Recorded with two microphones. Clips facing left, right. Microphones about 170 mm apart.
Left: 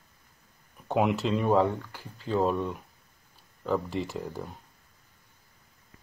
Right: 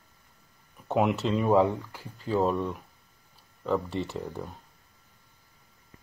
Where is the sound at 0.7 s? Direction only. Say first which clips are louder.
Even; centre (ahead or behind).